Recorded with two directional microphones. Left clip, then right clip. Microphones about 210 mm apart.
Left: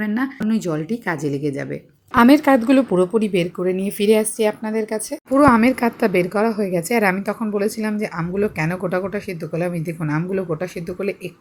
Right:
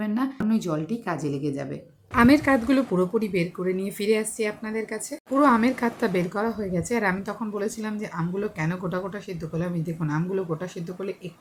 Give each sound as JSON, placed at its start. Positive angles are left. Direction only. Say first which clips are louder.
{"t": 0.0, "sound": "speech", "louder": "left 4 dB", "side_deg": 20}